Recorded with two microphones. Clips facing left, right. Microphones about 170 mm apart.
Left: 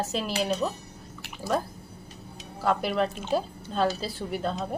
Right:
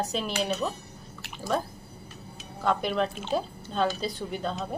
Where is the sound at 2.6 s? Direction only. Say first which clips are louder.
Left 1 dB; 5° left (ahead or behind).